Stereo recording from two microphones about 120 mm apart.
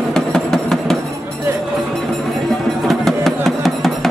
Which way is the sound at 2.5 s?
5° left (ahead or behind).